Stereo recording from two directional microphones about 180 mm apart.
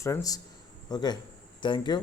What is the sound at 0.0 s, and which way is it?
Speech, 20° left (ahead or behind).